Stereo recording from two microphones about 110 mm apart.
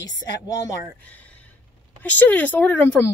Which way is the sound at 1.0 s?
15° left (ahead or behind).